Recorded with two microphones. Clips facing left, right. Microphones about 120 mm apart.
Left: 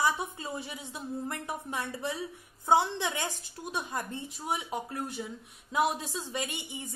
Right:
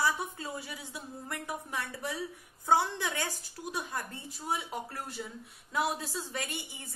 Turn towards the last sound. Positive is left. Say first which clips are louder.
# left 3 dB
turn(degrees=15)  # may be behind; listen again after turning